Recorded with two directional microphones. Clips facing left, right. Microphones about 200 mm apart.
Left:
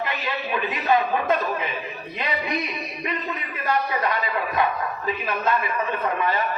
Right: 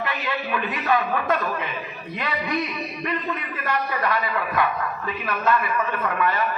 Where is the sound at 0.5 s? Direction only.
20° left (ahead or behind).